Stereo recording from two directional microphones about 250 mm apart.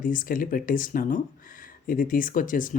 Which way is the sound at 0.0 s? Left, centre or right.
Left.